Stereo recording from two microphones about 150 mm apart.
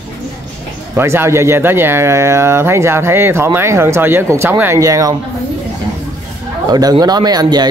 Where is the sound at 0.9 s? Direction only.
15° right (ahead or behind).